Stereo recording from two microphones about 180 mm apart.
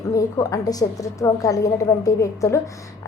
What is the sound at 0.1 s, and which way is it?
A woman's voice, 20° left (ahead or behind).